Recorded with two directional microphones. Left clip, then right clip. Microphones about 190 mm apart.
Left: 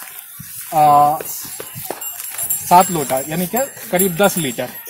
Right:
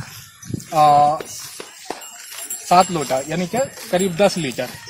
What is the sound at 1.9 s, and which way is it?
Horse, 50° right (ahead or behind).